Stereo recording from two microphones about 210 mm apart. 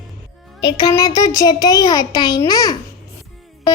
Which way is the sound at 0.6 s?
20° left (ahead or behind).